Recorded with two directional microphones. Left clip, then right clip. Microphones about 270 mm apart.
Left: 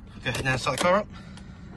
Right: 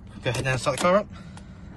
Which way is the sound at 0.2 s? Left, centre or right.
Centre.